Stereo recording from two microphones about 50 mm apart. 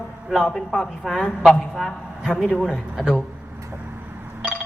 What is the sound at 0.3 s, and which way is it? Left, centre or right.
A man's voice, centre.